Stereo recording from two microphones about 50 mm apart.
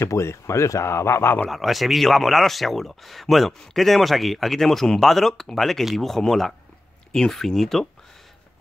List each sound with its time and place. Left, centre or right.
0.0 s speech: left
1.5 s speech: centre